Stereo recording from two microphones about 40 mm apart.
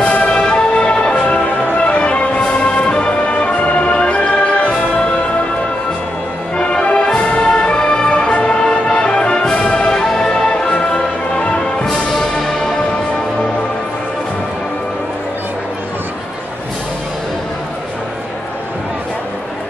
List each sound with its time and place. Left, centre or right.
0.0 s music: left
6.5 s music: left